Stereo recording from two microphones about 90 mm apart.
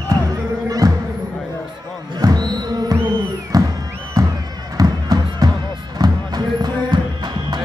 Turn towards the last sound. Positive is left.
turn(degrees=-50)  # may be behind; listen again after turning